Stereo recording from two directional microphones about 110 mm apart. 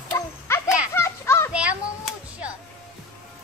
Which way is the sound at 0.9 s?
25° left (ahead or behind).